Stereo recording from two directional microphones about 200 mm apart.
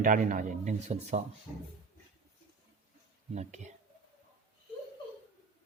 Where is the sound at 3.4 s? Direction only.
35° right (ahead or behind).